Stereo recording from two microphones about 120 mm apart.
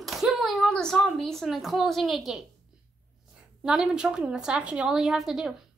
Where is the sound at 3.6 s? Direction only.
5° right (ahead or behind).